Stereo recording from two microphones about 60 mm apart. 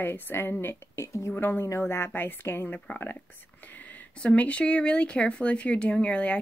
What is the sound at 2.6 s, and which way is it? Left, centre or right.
Speech, left.